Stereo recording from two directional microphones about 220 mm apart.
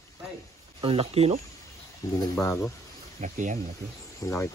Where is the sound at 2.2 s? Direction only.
15° left (ahead or behind).